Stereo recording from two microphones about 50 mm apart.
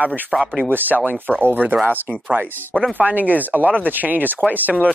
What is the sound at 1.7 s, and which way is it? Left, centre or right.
Speech, right.